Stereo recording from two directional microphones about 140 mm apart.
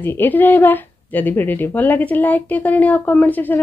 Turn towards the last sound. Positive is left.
turn(degrees=10)  # may be behind; listen again after turning